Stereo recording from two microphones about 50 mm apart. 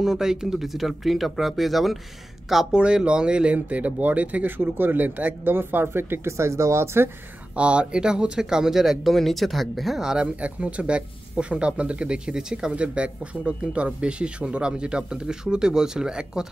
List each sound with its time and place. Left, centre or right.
0.0 s speech: centre
2.8 s speech: centre
4.6 s speech: right
6.2 s speech: right
7.5 s speech: right; by 10.0 s centre
10.0 s speech: right